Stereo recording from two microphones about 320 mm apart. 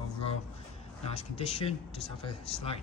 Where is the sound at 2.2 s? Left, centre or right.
Centre.